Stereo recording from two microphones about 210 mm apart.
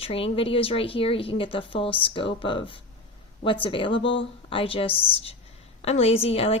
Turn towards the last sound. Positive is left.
turn(degrees=30)  # may be behind; listen again after turning